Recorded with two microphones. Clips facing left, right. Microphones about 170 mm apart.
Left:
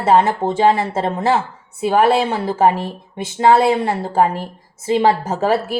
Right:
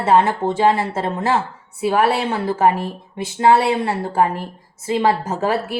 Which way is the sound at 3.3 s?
20° left (ahead or behind).